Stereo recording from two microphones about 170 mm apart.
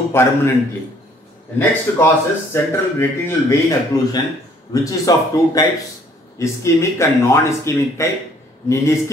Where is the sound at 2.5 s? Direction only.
15° left (ahead or behind).